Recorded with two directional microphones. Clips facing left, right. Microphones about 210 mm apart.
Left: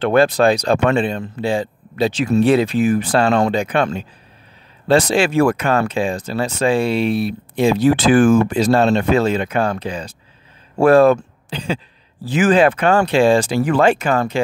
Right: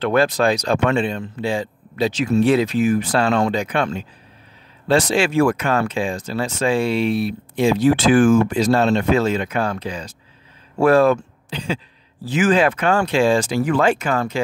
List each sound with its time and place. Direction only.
0.0 s speech: 30° left (ahead or behind)